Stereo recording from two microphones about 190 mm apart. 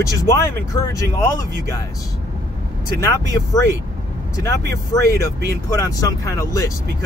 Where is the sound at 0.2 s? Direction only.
15° left (ahead or behind).